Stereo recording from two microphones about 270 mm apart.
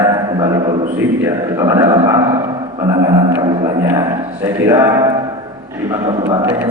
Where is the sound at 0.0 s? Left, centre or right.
Centre.